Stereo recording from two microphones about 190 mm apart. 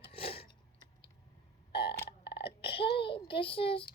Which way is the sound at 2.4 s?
30° left (ahead or behind).